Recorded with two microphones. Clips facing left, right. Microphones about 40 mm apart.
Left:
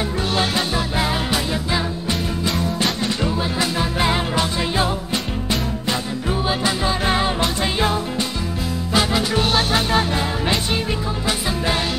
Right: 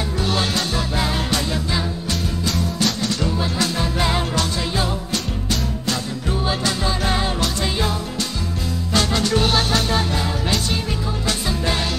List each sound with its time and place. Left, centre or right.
0.3 s music: left
8.9 s music: centre